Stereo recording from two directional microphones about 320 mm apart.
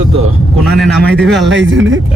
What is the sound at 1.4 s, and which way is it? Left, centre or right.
Speech, right.